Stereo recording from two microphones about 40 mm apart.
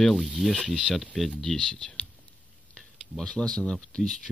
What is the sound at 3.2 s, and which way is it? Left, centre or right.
Speech, centre.